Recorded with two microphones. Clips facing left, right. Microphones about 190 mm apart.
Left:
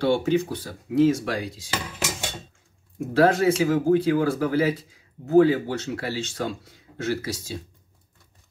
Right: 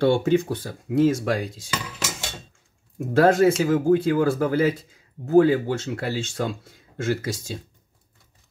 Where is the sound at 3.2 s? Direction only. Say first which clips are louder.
Right 2 dB; 50° right (ahead or behind).